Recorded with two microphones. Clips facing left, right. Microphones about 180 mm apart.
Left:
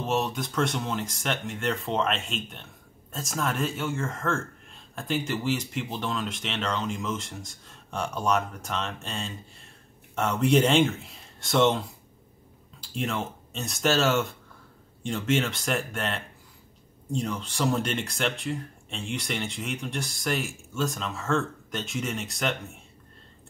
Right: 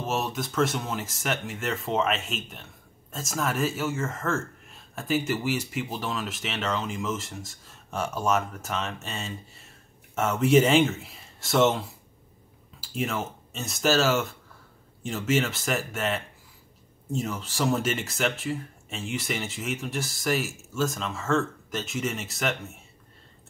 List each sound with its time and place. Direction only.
0.0 s speech: centre (ahead or behind)
12.8 s speech: 5° right (ahead or behind)